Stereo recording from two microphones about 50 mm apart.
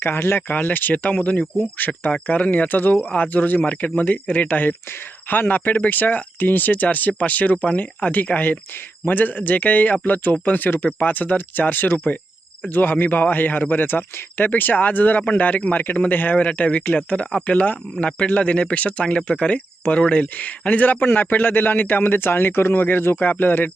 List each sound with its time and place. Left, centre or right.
0.0 s speech: left
1.1 s speech: left